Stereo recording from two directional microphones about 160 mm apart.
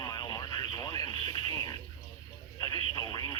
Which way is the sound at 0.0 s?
25° left (ahead or behind).